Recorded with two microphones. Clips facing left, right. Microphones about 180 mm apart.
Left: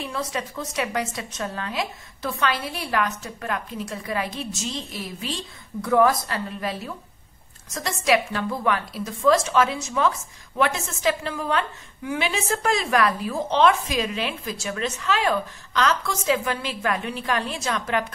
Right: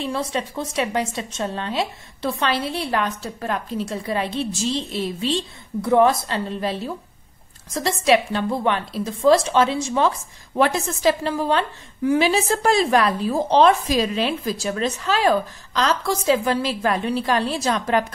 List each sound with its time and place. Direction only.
0.0 s a woman's voice: 30° right (ahead or behind)